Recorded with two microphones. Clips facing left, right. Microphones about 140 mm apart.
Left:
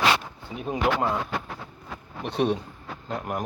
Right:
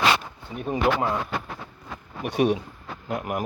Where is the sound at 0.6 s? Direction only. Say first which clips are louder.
Right 2 dB; centre (ahead or behind).